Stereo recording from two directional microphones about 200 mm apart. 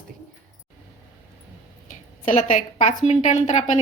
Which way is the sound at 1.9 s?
35° left (ahead or behind).